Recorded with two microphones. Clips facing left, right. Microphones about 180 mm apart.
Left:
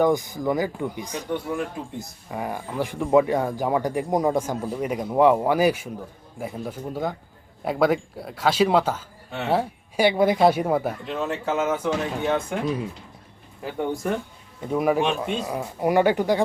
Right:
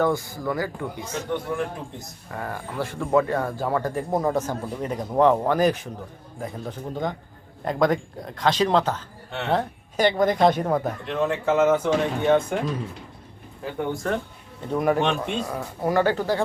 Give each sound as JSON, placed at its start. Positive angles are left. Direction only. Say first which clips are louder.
{"t": 0.0, "sound": "a man's voice", "louder": "left 3 dB", "side_deg": 15}
{"t": 14.6, "sound": "a man's voice", "louder": "even", "side_deg": 5}